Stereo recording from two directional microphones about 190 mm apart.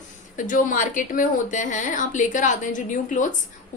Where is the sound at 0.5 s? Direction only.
45° left (ahead or behind).